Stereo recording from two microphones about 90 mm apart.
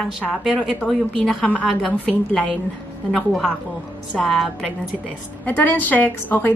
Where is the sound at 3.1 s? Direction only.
5° left (ahead or behind).